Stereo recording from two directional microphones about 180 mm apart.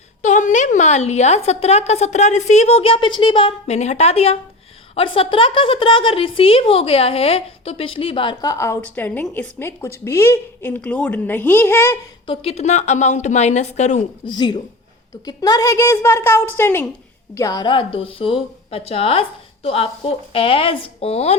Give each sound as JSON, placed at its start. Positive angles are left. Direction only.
{"t": 0.2, "sound": "a woman's voice", "side_deg": 45}
{"t": 12.2, "sound": "a woman's voice", "side_deg": 30}
{"t": 14.3, "sound": "a woman's voice", "side_deg": 25}